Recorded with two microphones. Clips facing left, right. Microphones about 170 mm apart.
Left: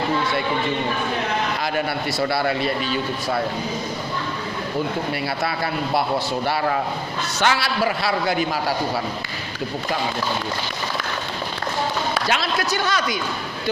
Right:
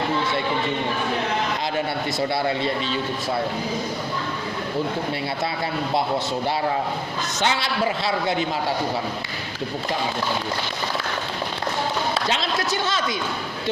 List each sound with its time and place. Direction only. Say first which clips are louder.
2.3 s a man's voice: left 1 dB; 20° right (ahead or behind)
7.3 s a man's voice: left 3 dB; 20° right (ahead or behind)
12.1 s a man's voice: left 1 dB; 25° right (ahead or behind)